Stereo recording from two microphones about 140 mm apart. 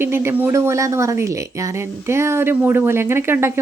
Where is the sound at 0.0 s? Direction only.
15° right (ahead or behind).